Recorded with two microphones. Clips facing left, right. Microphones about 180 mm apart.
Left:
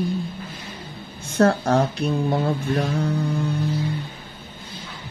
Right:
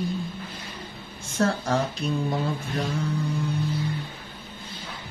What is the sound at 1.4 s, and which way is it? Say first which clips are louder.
Speech: left 6 dB; 60° left (ahead or behind).